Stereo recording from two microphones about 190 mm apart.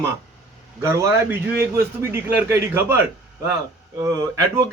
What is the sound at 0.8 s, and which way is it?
A man's voice, 15° right (ahead or behind).